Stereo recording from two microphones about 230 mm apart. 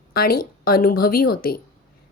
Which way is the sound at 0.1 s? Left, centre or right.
Left.